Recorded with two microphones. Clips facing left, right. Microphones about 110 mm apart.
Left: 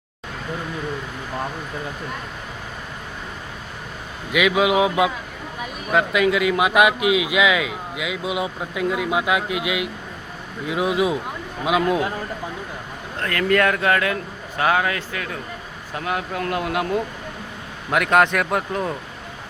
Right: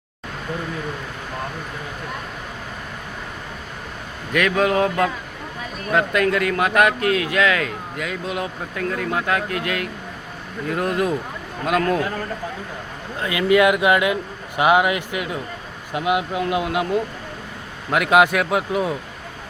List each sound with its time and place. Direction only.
4.3 s a man's voice: 10° left (ahead or behind)
13.1 s a man's voice: 10° right (ahead or behind)